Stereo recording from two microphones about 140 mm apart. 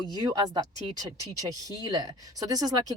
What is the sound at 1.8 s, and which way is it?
Speech, 25° right (ahead or behind).